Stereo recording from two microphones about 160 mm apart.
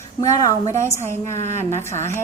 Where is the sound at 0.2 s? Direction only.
20° left (ahead or behind).